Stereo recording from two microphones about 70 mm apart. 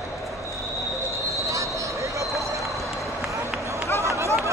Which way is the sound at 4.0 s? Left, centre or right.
Right.